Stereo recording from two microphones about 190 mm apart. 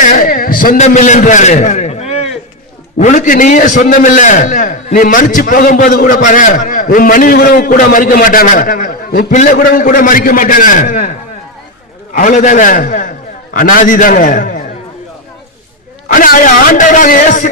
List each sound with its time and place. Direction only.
0.0 s a sound: 45° left (ahead or behind)
3.0 s a man's voice: 40° left (ahead or behind)
12.1 s a man's voice: 40° left (ahead or behind)
16.1 s a man's voice: 45° left (ahead or behind)